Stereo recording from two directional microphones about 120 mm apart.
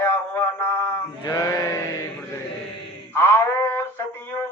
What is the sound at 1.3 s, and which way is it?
Sheep, 25° left (ahead or behind).